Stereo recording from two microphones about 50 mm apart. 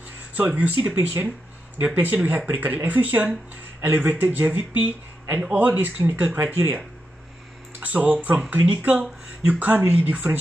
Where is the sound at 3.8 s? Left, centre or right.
Right.